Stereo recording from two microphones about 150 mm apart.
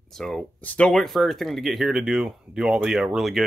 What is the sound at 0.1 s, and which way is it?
Speech, 5° left (ahead or behind).